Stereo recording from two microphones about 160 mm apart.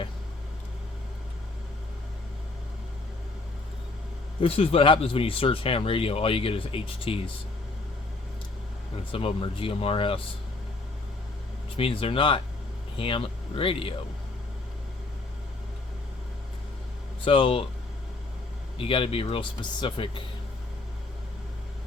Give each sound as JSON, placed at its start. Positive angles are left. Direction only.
{"t": 4.4, "sound": "speech", "side_deg": 35}
{"t": 9.1, "sound": "speech", "side_deg": 35}
{"t": 11.8, "sound": "speech", "side_deg": 35}
{"t": 17.2, "sound": "speech", "side_deg": 35}
{"t": 18.9, "sound": "speech", "side_deg": 35}